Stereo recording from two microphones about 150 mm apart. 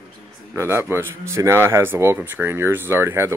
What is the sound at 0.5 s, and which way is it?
Speech, 15° right (ahead or behind).